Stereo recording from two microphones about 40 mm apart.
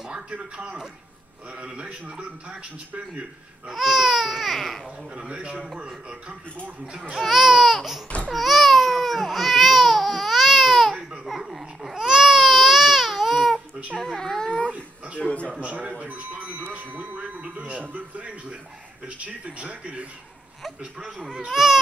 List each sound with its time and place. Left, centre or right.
0.1 s a man's voice: right
3.7 s baby cry: centre
5.1 s a man's voice: right
7.2 s baby cry: centre
14.2 s speech: centre
15.1 s a man's voice: left
15.6 s speech: right
21.5 s speech: centre